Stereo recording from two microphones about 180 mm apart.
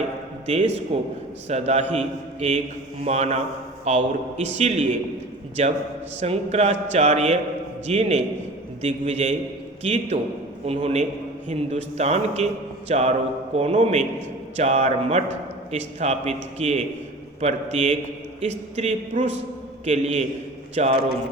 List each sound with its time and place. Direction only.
0.4 s speech: 40° right (ahead or behind)